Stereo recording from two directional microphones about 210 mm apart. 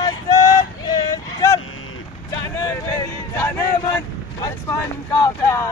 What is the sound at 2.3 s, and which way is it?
Vehicle, 15° left (ahead or behind).